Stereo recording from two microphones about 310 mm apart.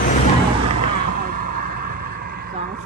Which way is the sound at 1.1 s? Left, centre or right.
Right.